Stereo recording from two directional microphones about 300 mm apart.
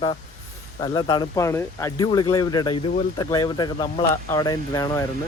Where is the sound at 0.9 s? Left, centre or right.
Centre.